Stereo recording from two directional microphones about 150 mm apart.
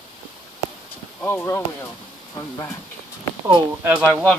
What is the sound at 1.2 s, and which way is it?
Speech, 15° left (ahead or behind).